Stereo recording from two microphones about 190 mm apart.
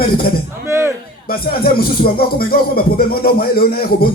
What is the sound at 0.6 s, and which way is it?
Speech, 15° right (ahead or behind).